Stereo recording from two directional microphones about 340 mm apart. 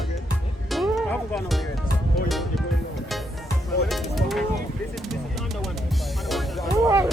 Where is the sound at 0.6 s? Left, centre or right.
Centre.